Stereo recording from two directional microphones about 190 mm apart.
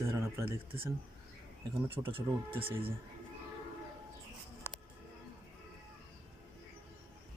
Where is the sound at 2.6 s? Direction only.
30° right (ahead or behind).